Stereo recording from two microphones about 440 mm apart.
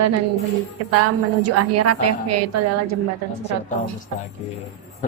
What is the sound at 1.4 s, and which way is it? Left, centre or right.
Speech, right.